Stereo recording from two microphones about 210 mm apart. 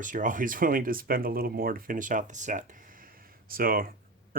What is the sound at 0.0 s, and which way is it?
Speech, 40° right (ahead or behind).